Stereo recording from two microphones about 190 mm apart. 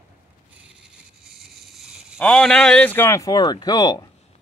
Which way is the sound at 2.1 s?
5° left (ahead or behind).